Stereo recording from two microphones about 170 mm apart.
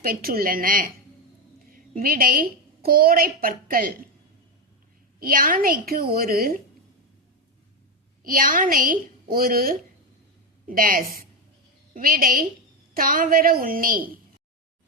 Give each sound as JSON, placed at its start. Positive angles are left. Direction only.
{"t": 0.0, "sound": "a woman's voice", "side_deg": -60}
{"t": 5.2, "sound": "a woman's voice", "side_deg": -55}
{"t": 8.2, "sound": "a woman's voice", "side_deg": -55}